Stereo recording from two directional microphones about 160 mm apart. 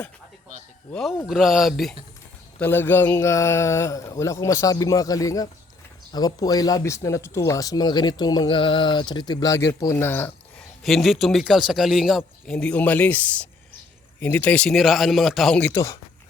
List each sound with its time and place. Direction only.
1.3 s a man's voice: centre (ahead or behind)
2.6 s speech: 15° left (ahead or behind)
10.8 s a man's voice: centre (ahead or behind)
15.7 s speech: 20° left (ahead or behind)